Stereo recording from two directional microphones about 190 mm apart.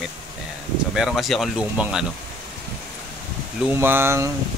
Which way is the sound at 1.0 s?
Centre (ahead or behind).